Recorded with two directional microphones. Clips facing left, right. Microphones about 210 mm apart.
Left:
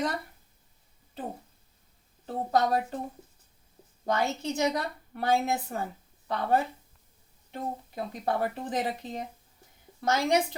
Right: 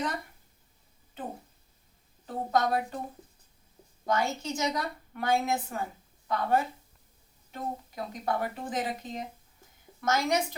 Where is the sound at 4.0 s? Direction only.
35° left (ahead or behind).